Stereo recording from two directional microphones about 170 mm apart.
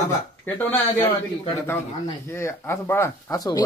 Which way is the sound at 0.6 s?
10° left (ahead or behind).